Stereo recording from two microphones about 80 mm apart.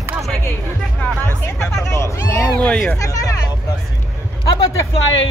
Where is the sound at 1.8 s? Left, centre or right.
Left.